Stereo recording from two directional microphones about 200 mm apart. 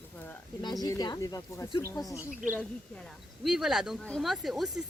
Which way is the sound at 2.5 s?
5° left (ahead or behind).